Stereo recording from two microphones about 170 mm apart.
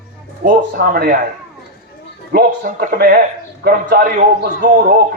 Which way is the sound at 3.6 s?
60° right (ahead or behind).